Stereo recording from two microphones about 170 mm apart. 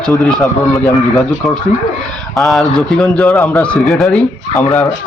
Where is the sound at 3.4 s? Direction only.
10° left (ahead or behind).